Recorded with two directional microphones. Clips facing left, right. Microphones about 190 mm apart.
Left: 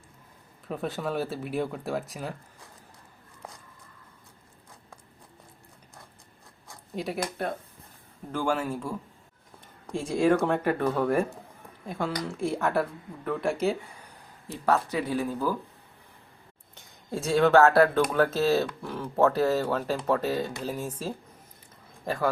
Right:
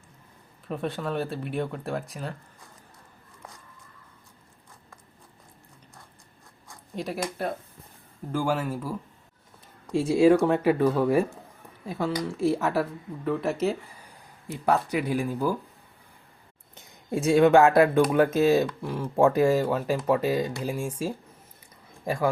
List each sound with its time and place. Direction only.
0.7 s speech: centre (ahead or behind)
6.9 s speech: centre (ahead or behind)
14.6 s speech: 15° right (ahead or behind)
16.7 s speech: 20° right (ahead or behind)